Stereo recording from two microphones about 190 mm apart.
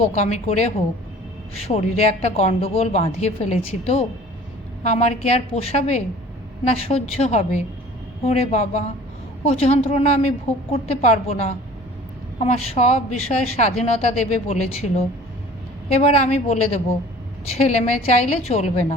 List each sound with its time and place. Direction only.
0.0 s a woman's voice: 35° left (ahead or behind)